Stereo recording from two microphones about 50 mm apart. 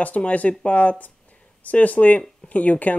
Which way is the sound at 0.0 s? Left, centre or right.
Left.